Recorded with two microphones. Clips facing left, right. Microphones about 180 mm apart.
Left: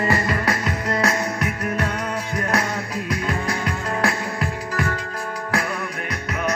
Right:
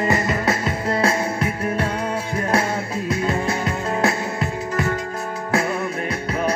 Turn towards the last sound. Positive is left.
turn(degrees=-30)  # may be behind; listen again after turning